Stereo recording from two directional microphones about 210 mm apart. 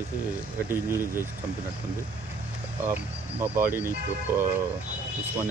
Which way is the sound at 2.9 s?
10° right (ahead or behind).